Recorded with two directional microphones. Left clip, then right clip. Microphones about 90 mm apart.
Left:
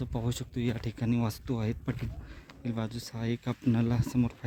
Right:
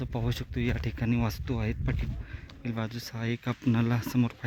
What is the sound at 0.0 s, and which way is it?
Speech, 5° left (ahead or behind).